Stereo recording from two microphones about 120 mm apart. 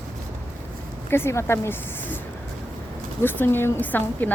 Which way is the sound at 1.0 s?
20° left (ahead or behind).